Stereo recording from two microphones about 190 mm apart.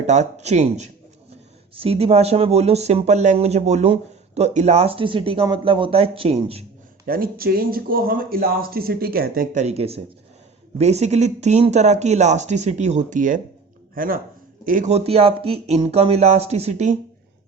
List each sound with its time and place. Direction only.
0.1 s speech: 35° right (ahead or behind)
7.0 s speech: 50° right (ahead or behind)
9.6 s speech: 30° right (ahead or behind)